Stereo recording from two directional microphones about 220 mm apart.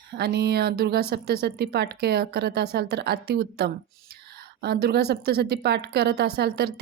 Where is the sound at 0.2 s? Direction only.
50° right (ahead or behind).